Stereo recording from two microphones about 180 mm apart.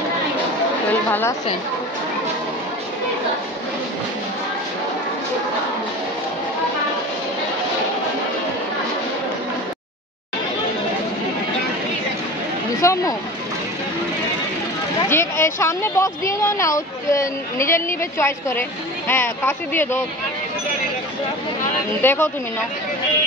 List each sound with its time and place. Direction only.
12.8 s a sound: 15° left (ahead or behind)
15.0 s speech: 15° left (ahead or behind)
22.0 s speech: 10° left (ahead or behind)